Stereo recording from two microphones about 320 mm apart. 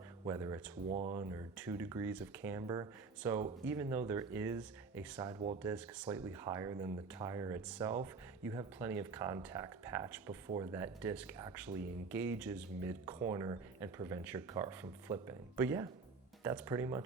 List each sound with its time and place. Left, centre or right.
0.3 s speech: centre
0.9 s speech: right
1.1 s speech: centre
5.6 s speech: centre